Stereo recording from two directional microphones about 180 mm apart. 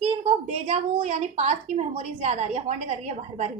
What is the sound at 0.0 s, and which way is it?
A woman's voice, 35° right (ahead or behind).